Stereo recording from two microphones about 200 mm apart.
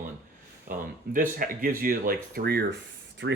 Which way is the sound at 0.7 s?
40° right (ahead or behind).